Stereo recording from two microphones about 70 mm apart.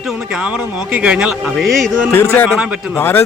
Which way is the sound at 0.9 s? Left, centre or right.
Centre.